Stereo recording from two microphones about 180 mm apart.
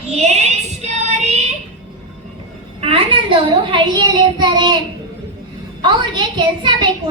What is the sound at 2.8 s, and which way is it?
Child singing, 30° right (ahead or behind).